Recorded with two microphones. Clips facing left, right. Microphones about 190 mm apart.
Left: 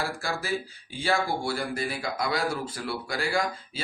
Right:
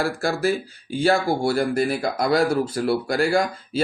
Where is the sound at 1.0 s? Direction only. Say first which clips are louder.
Right 7 dB; 45° right (ahead or behind).